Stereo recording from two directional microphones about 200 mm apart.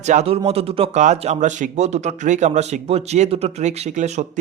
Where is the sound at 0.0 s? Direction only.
35° right (ahead or behind).